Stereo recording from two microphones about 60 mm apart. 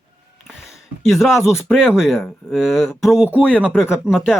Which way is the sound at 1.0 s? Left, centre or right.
Centre.